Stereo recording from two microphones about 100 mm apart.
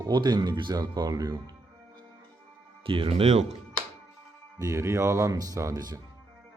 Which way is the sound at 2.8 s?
65° right (ahead or behind).